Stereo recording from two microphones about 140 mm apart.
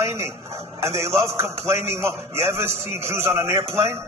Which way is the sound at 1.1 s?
20° right (ahead or behind).